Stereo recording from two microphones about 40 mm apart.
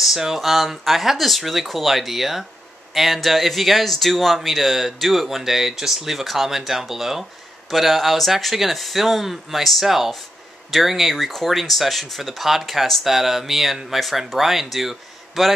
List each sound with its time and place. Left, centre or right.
0.0 s speech: centre